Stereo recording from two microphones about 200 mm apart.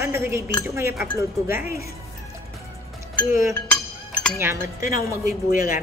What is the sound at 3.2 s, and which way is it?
Speech, 15° right (ahead or behind).